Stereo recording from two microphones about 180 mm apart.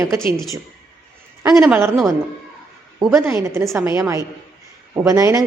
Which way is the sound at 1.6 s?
5° right (ahead or behind).